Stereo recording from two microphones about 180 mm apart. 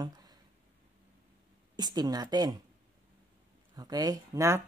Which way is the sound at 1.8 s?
20° right (ahead or behind).